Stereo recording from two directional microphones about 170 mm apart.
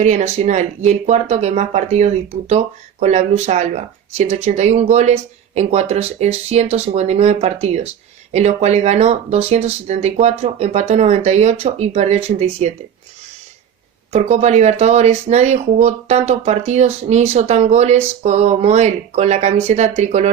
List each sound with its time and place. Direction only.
0.0 s speech: 40° right (ahead or behind)
14.1 s speech: 40° right (ahead or behind)